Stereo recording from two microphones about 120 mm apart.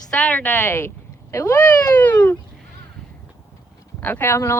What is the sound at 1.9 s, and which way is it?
Speech, 15° left (ahead or behind).